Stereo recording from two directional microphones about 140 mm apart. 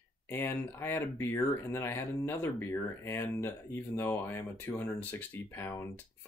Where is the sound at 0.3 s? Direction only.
15° left (ahead or behind).